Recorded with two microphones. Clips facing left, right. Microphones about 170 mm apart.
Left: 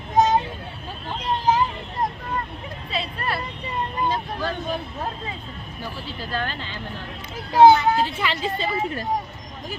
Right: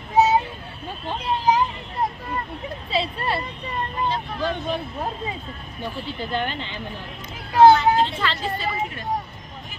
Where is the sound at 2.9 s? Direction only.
25° right (ahead or behind).